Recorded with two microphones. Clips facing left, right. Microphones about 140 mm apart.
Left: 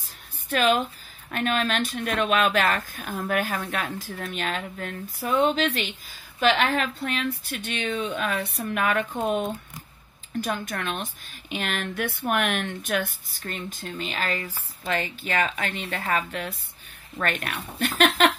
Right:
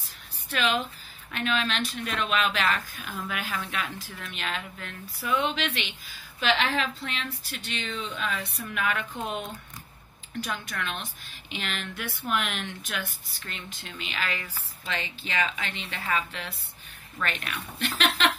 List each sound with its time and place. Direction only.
0.5 s speech: 45° left (ahead or behind)